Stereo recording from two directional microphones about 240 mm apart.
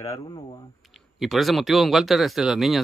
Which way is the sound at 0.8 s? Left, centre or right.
Centre.